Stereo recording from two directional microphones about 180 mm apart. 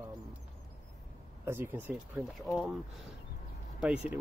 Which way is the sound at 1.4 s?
10° right (ahead or behind).